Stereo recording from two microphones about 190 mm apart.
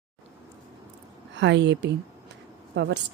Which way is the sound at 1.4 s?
70° right (ahead or behind).